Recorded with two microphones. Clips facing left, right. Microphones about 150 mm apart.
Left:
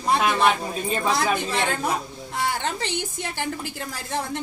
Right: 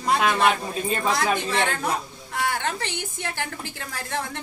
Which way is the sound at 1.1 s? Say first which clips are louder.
Even; 15° left (ahead or behind).